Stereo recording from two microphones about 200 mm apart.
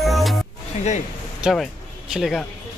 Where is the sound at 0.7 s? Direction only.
35° left (ahead or behind).